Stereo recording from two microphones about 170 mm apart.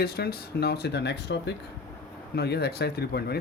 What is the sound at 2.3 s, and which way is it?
Speech, 75° left (ahead or behind).